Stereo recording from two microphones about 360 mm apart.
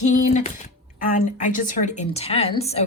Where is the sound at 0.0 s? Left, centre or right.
Centre.